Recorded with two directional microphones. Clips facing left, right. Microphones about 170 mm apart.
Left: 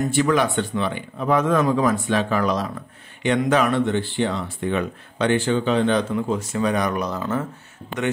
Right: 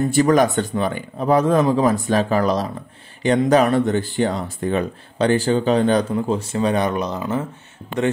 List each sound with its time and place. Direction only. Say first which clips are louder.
0.1 s speech: right 6 dB; 40° right (ahead or behind); by 7.4 s 20° right (ahead or behind)